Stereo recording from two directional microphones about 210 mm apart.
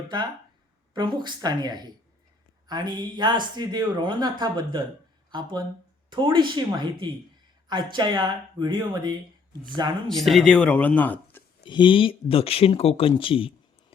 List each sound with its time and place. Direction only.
0.9 s speech: 20° right (ahead or behind)
10.1 s speech: centre (ahead or behind)
11.6 s speech: 25° left (ahead or behind)